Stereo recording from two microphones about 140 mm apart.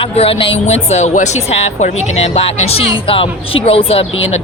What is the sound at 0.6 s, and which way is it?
Speech, 50° left (ahead or behind).